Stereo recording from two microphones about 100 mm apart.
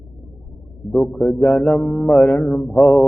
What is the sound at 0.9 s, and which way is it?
Speech, centre (ahead or behind).